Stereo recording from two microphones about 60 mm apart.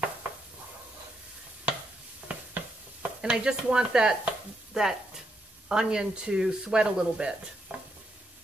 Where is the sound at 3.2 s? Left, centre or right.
Centre.